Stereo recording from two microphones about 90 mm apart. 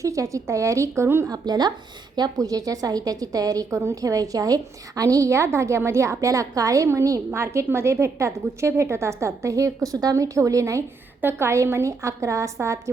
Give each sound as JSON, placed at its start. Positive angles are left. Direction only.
{"t": 0.0, "sound": "a woman's voice", "side_deg": -35}
{"t": 1.3, "sound": "a woman's voice", "side_deg": -50}